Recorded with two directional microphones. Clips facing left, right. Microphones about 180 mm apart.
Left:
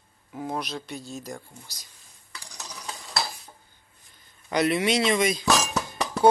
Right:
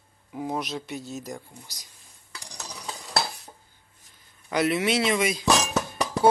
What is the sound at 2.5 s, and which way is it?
Stir, 35° right (ahead or behind).